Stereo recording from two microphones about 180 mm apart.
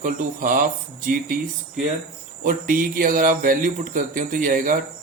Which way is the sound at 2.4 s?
50° right (ahead or behind).